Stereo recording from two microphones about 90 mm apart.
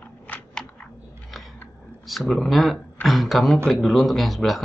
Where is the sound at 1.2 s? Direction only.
Centre (ahead or behind).